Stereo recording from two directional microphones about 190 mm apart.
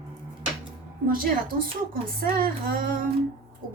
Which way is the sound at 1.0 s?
50° right (ahead or behind).